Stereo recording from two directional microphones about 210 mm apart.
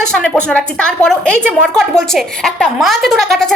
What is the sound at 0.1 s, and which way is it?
A woman's voice, 5° left (ahead or behind).